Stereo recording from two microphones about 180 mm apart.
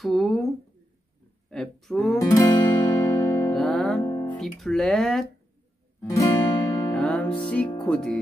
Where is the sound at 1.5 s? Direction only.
5° left (ahead or behind).